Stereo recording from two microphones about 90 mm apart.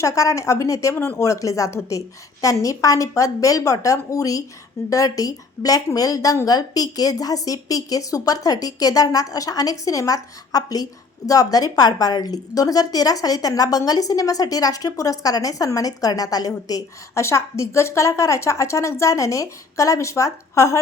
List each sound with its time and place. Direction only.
0.0 s a woman's voice: 35° left (ahead or behind)
0.9 s speech: 25° left (ahead or behind)
1.2 s a woman's voice: 35° left (ahead or behind)
17.2 s a woman's voice: 35° left (ahead or behind)